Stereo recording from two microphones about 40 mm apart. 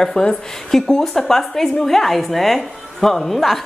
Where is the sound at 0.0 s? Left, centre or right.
Centre.